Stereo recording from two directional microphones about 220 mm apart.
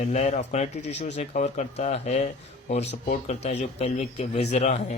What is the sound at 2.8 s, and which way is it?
Speech, 50° left (ahead or behind).